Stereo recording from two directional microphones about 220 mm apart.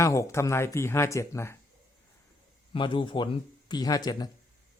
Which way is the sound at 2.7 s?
20° left (ahead or behind).